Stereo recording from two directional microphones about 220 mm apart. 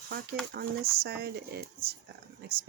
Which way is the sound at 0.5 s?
45° right (ahead or behind).